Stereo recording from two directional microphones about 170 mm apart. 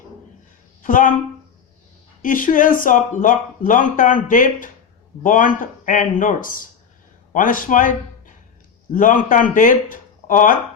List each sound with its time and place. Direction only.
0.8 s speech: 50° left (ahead or behind)
2.2 s a man's voice: 50° left (ahead or behind)